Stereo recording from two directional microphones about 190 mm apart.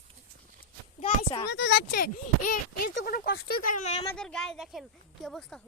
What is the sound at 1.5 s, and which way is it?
Speech, 65° left (ahead or behind).